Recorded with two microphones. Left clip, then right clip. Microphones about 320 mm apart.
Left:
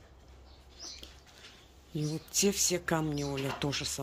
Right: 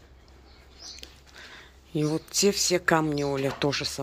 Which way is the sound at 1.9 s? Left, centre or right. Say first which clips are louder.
Right 8 dB; centre.